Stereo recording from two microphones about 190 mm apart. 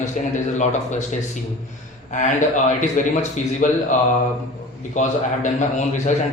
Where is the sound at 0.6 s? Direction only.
40° left (ahead or behind).